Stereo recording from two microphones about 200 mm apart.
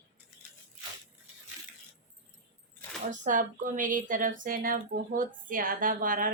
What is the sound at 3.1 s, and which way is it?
Speech, 40° right (ahead or behind).